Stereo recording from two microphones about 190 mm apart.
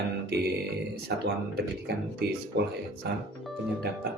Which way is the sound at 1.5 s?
55° right (ahead or behind).